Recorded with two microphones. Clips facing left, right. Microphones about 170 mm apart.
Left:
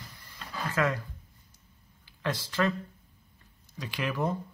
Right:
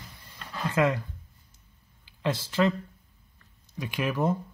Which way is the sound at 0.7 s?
25° right (ahead or behind).